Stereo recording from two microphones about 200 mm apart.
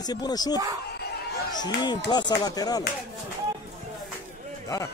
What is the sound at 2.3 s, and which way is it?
Speech, 20° left (ahead or behind).